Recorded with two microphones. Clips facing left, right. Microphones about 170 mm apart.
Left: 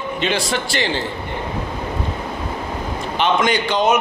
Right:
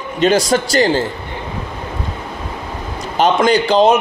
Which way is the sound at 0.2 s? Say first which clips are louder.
Right 9 dB; 40° right (ahead or behind).